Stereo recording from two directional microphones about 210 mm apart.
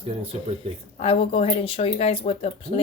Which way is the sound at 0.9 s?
30° left (ahead or behind).